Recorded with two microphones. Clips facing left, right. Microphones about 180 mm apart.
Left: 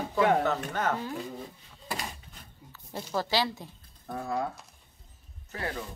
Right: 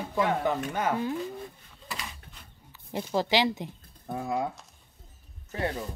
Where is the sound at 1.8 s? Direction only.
40° left (ahead or behind).